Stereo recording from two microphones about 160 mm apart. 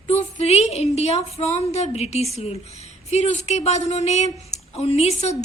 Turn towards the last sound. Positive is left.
turn(degrees=40)  # may be behind; listen again after turning